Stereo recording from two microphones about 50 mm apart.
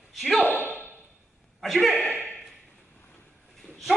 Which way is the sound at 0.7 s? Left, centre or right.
Left.